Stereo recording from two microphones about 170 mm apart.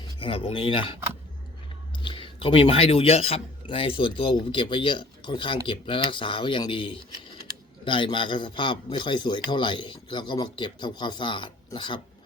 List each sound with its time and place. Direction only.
0.2 s a man's voice: 35° left (ahead or behind)